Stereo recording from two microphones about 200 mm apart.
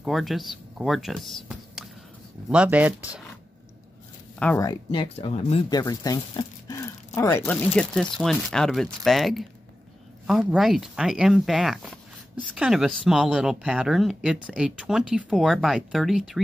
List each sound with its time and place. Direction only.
0.0 s speech: centre (ahead or behind)
4.4 s speech: 5° left (ahead or behind)
4.6 s speech: 25° left (ahead or behind); by 16.3 s centre (ahead or behind)